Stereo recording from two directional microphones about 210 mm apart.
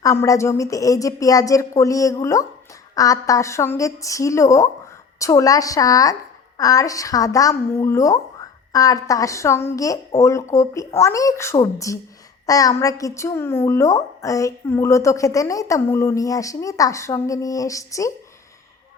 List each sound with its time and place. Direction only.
0.0 s a woman's voice: 15° left (ahead or behind)